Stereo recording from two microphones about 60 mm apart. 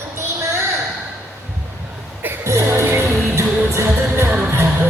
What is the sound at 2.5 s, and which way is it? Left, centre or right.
Music, right.